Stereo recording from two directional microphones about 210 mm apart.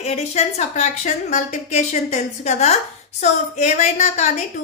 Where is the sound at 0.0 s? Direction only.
30° left (ahead or behind).